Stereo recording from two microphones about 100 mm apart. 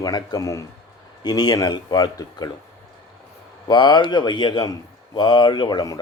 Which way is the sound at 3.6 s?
45° left (ahead or behind).